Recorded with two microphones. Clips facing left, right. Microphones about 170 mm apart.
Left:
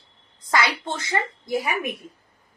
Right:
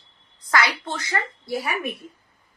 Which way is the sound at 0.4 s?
25° left (ahead or behind).